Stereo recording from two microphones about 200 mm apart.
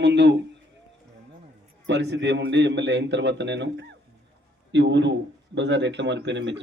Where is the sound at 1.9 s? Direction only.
60° right (ahead or behind).